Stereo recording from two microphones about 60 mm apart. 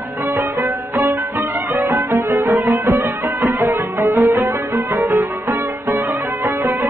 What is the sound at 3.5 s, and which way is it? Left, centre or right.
Music, right.